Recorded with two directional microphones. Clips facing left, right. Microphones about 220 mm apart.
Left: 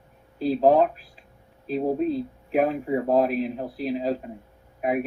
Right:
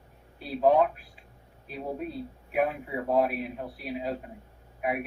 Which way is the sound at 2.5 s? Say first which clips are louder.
Left 6 dB; 35° left (ahead or behind).